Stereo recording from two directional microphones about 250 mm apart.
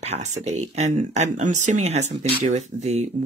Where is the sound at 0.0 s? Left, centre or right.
Right.